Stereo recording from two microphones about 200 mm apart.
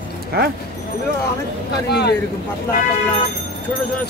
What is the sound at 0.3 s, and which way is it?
Speech, 50° right (ahead or behind).